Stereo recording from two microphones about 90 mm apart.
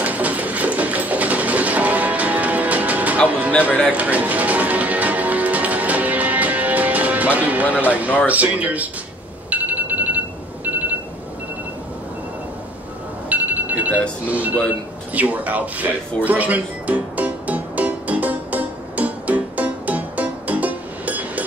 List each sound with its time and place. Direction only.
0.0 s sewing machine: 15° right (ahead or behind)
3.3 s music: 15° right (ahead or behind)
8.3 s speech: 15° right (ahead or behind)
9.5 s ringtone: 15° right (ahead or behind)
13.3 s a sound: 15° right (ahead or behind)
14.2 s speech: 15° right (ahead or behind)
16.3 s music: 15° right (ahead or behind)